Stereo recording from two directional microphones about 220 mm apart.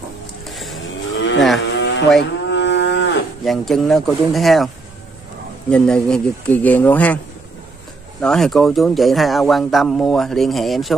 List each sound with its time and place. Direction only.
0.5 s vehicle: centre (ahead or behind)
1.1 s livestock: 60° left (ahead or behind)
1.8 s cattle: 55° left (ahead or behind)
2.5 s livestock: 55° left (ahead or behind)
3.4 s speech: centre (ahead or behind)
5.7 s speech: 5° left (ahead or behind)
8.2 s speech: centre (ahead or behind)